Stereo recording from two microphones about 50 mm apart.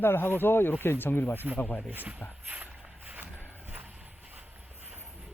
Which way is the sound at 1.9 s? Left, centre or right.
Right.